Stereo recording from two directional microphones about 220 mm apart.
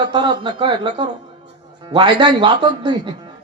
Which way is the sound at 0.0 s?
20° right (ahead or behind).